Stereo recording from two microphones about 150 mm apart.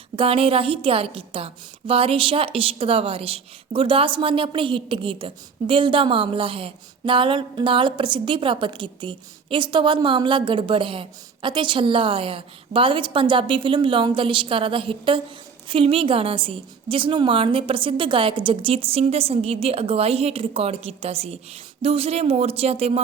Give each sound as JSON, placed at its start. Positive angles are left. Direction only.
{"t": 0.2, "sound": "a woman's voice", "side_deg": -40}